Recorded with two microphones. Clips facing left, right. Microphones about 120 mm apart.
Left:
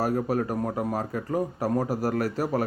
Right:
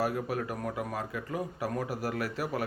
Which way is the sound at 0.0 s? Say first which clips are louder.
Left 6 dB; 40° left (ahead or behind).